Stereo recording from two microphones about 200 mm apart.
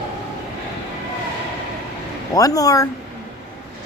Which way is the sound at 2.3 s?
15° left (ahead or behind).